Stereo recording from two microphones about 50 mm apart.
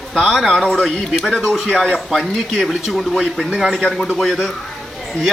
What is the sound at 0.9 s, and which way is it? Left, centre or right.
Speech, centre.